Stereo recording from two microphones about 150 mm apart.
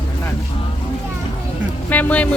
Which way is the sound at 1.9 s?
10° left (ahead or behind).